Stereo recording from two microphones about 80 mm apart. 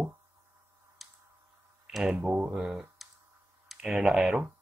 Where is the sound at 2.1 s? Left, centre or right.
Right.